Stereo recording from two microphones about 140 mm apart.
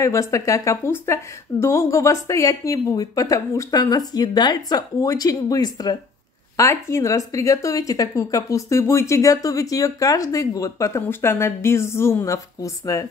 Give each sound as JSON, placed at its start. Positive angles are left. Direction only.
{"t": 0.0, "sound": "speech", "side_deg": 20}